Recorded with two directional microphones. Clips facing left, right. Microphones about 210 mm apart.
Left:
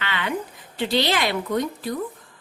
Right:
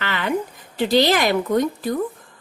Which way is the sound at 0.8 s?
45° right (ahead or behind).